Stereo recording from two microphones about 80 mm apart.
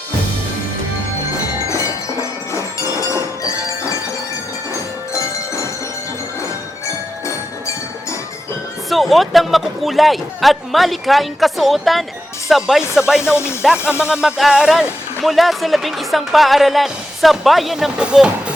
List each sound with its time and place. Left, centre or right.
3.1 s music: left
8.9 s speech: centre
13.3 s music: left
14.1 s speech: centre